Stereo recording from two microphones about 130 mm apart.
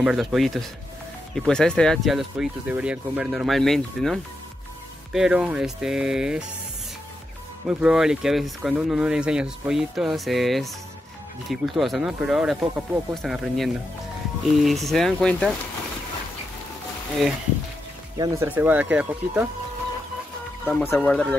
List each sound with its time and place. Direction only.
0.0 s speech: 5° right (ahead or behind)
7.6 s speech: 5° right (ahead or behind)
18.1 s speech: 30° right (ahead or behind)
18.4 s speech: 15° right (ahead or behind)
20.6 s speech: 20° left (ahead or behind)
21.0 s speech: 5° left (ahead or behind)